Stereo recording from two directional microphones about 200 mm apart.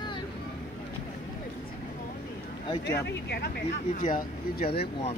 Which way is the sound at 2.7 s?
20° left (ahead or behind).